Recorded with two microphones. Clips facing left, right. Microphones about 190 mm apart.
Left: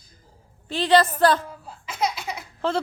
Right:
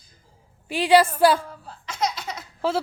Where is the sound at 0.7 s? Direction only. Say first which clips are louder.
Right 1 dB; 10° right (ahead or behind).